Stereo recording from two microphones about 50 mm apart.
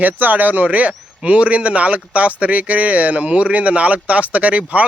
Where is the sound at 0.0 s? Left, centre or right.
Right.